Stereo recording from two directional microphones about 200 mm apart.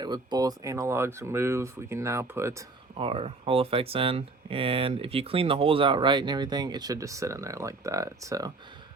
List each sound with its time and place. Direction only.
0.0 s speech: 20° right (ahead or behind)
3.0 s speech: 25° right (ahead or behind)